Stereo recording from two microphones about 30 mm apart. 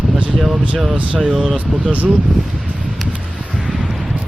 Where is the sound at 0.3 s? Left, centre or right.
Centre.